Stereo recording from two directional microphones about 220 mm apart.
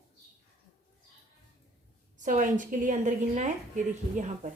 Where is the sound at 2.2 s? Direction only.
35° right (ahead or behind).